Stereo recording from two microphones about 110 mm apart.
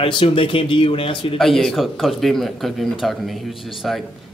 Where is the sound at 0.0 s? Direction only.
55° left (ahead or behind).